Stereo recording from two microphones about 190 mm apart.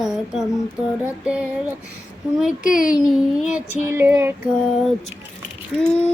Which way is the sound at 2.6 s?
45° left (ahead or behind).